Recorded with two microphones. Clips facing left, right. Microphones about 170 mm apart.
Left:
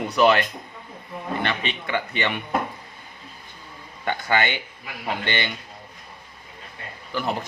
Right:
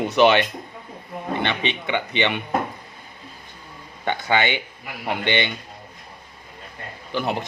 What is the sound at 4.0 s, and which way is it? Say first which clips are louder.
Speech: right 2 dB; 20° right (ahead or behind).